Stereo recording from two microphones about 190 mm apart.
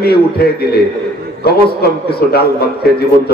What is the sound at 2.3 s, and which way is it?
A man's voice, 55° left (ahead or behind).